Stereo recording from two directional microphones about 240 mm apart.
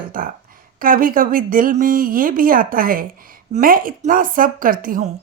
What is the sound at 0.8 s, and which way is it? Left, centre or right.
Speech, right.